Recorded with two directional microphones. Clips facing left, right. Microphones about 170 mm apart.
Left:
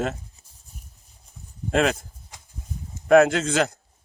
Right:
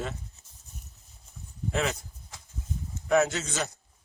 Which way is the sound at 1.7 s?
90° left.